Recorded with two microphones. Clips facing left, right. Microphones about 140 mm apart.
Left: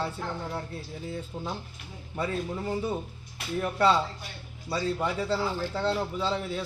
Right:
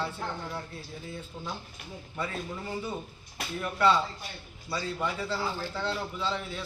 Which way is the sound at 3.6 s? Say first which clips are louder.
Left 1 dB; 35° left (ahead or behind).